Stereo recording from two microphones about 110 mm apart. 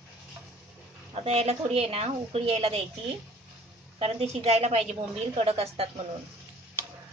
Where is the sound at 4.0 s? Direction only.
70° right (ahead or behind).